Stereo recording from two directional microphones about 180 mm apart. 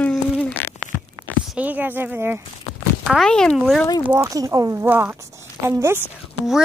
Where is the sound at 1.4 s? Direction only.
10° right (ahead or behind).